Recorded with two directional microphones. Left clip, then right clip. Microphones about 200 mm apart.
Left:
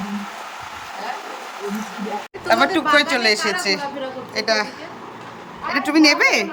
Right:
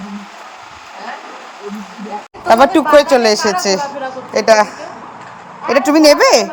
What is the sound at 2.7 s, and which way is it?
Speech, 15° right (ahead or behind).